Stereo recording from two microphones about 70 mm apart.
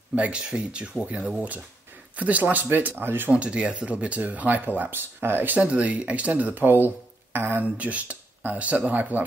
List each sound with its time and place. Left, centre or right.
0.1 s speech: right
3.3 s speech: centre
5.6 s speech: centre